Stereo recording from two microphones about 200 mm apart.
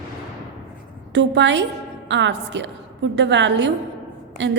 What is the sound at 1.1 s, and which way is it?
A woman's voice, 65° right (ahead or behind).